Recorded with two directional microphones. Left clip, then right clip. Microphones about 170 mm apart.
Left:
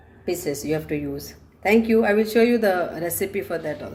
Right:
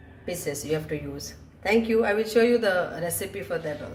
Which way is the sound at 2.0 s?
45° left (ahead or behind).